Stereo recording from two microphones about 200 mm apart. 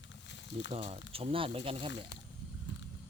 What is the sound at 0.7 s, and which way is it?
Speech, 30° right (ahead or behind).